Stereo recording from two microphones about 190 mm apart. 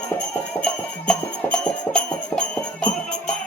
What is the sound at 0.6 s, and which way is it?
Music, 5° left (ahead or behind).